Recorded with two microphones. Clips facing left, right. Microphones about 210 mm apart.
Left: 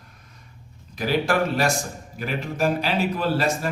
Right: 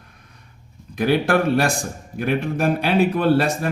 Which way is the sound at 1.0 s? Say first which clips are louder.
Right 4 dB; 60° right (ahead or behind).